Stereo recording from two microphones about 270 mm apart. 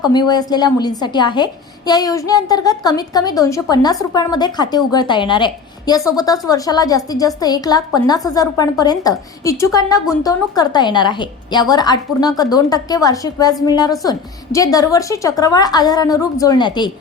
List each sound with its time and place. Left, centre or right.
0.0 s a woman's voice: centre